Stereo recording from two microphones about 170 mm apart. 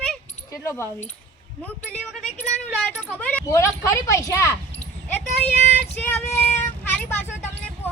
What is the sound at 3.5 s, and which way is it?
Speech, 15° left (ahead or behind).